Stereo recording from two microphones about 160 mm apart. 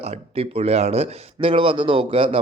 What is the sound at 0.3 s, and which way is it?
Speech, 40° right (ahead or behind).